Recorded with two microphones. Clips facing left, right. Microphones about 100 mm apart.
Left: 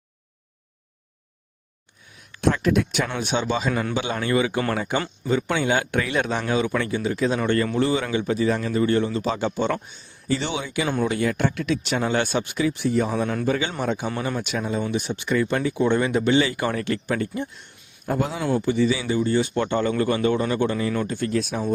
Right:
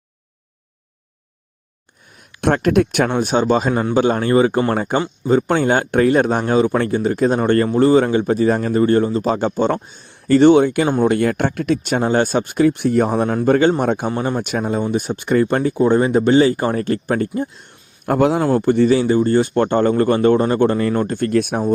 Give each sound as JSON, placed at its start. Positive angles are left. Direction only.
{"t": 2.4, "sound": "speech", "side_deg": -60}
{"t": 10.0, "sound": "speech", "side_deg": -60}
{"t": 14.2, "sound": "speech", "side_deg": -40}
{"t": 18.0, "sound": "a man's voice", "side_deg": -70}
{"t": 18.5, "sound": "speech", "side_deg": -55}